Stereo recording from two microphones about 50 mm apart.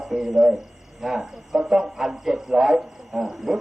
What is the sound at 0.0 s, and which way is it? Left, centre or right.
Speech, centre.